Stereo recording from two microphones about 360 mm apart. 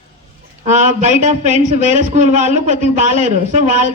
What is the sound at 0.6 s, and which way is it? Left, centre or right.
A man's voice, centre.